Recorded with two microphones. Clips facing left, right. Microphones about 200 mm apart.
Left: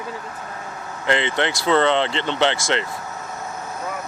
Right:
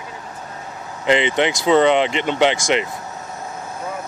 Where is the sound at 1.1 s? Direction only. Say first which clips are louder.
Right 4 dB; 15° right (ahead or behind).